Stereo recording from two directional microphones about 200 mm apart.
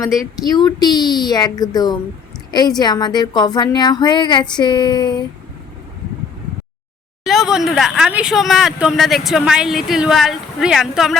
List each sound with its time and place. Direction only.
0.0 s a woman's voice: 15° left (ahead or behind)
7.3 s speech: centre (ahead or behind)